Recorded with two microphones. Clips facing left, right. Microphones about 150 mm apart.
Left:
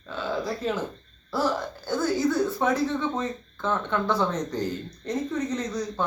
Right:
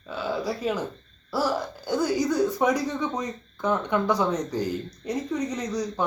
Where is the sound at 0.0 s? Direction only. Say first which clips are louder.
Right 1 dB; 10° right (ahead or behind).